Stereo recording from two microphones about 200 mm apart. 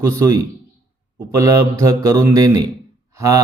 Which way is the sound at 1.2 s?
15° right (ahead or behind).